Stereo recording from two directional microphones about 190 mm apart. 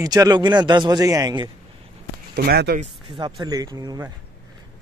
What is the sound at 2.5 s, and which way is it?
Speech, 55° right (ahead or behind).